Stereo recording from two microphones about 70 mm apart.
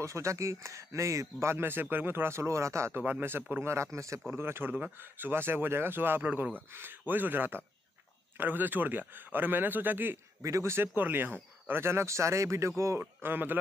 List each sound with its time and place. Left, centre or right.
0.0 s speech: right
3.0 s a man's voice: right
3.6 s speech: right
4.3 s a man's voice: right
10.4 s speech: right
11.0 s speech: right
13.0 s a man's voice: right